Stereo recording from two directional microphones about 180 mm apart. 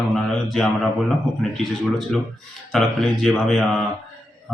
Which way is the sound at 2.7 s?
Centre (ahead or behind).